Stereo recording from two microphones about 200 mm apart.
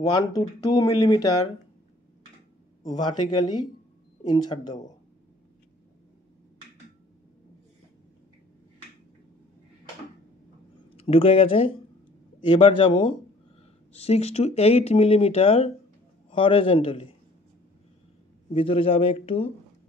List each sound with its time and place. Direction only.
0.0 s speech: 20° left (ahead or behind)
2.9 s speech: 20° left (ahead or behind)
10.9 s speech: 30° left (ahead or behind)
18.5 s speech: 25° left (ahead or behind)